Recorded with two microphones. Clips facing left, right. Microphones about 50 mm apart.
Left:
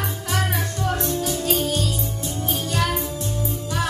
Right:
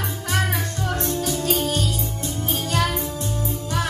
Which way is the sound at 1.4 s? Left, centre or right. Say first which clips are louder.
Even; right.